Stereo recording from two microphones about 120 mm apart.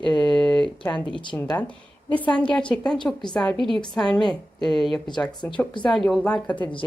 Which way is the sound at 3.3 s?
20° left (ahead or behind).